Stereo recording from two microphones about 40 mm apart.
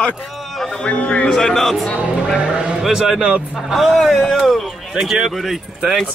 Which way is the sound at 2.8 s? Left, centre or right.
Centre.